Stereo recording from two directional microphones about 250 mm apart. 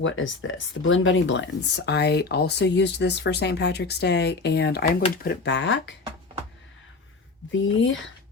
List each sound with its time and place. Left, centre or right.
0.0 s speech: left
7.5 s speech: left